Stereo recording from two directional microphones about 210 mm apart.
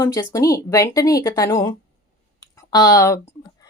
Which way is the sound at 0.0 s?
20° left (ahead or behind).